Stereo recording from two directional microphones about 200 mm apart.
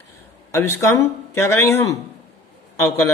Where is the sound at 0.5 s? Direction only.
15° left (ahead or behind).